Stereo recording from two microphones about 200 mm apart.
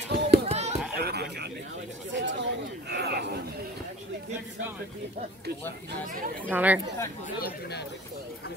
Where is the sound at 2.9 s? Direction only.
55° right (ahead or behind).